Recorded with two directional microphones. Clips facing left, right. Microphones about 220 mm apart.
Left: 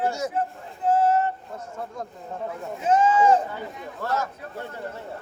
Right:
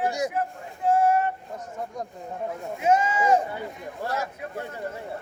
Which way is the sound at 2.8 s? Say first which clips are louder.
Left 3 dB; 10° right (ahead or behind).